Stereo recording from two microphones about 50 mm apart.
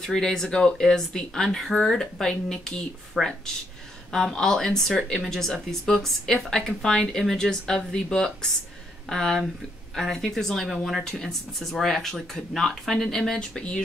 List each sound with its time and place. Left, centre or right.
0.0 s speech: centre
3.2 s speech: centre
4.1 s speech: centre